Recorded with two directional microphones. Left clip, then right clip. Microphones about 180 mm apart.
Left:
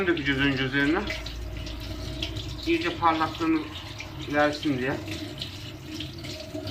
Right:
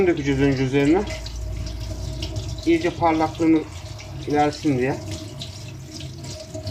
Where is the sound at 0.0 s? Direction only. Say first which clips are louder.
Right 5 dB; 30° right (ahead or behind).